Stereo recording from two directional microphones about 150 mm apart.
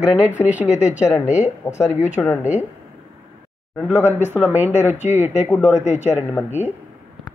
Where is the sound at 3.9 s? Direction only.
15° right (ahead or behind).